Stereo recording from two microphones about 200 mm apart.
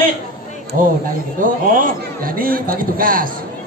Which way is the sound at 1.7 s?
45° right (ahead or behind).